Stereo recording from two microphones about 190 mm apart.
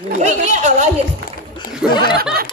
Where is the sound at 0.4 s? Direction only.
40° right (ahead or behind).